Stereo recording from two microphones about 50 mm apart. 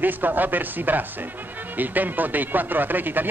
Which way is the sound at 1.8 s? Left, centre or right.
Right.